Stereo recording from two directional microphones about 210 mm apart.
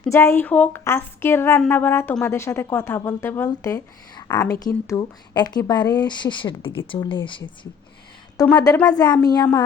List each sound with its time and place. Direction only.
0.0 s a woman's voice: 10° left (ahead or behind)